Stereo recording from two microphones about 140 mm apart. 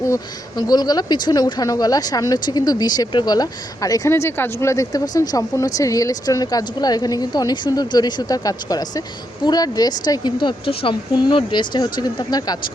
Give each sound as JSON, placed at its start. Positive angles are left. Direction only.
{"t": 0.0, "sound": "speech", "side_deg": 25}